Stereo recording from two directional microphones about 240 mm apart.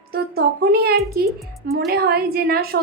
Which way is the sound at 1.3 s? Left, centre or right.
Centre.